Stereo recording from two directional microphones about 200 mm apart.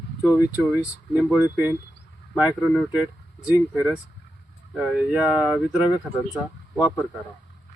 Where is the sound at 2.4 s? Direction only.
5° right (ahead or behind).